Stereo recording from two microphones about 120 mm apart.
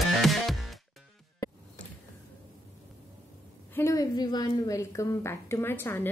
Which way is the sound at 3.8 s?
25° left (ahead or behind).